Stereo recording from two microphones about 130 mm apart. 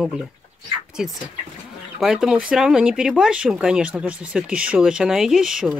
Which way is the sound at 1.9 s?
5° right (ahead or behind).